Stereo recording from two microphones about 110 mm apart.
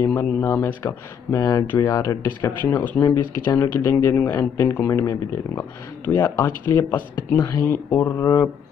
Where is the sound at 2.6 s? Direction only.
15° left (ahead or behind); by 6.4 s 35° left (ahead or behind).